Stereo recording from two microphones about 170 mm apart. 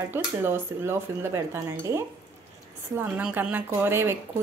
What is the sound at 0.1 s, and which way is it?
Speech, 15° right (ahead or behind).